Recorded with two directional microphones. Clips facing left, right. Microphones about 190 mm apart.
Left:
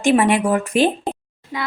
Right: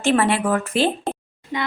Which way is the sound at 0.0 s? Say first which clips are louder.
Left 3 dB; 15° left (ahead or behind).